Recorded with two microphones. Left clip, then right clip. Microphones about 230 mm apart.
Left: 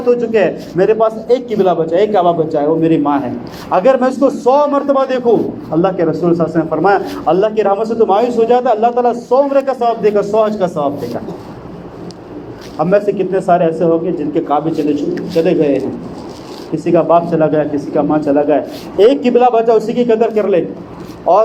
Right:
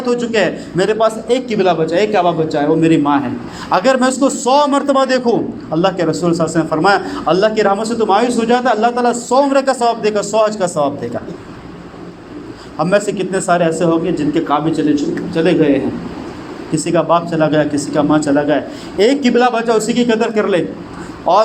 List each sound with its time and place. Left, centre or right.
0.2 s a man's voice: right
12.7 s a man's voice: right